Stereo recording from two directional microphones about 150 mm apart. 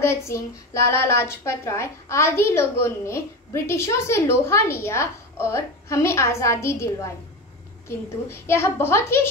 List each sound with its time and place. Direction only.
0.0 s a woman's voice: 20° left (ahead or behind)